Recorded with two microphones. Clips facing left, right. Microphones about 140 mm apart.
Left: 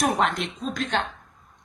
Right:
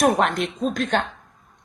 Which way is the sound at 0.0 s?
55° right (ahead or behind).